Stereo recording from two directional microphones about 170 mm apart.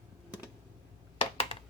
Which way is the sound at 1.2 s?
35° left (ahead or behind).